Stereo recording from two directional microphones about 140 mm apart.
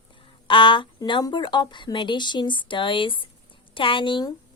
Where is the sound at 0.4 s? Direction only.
35° left (ahead or behind).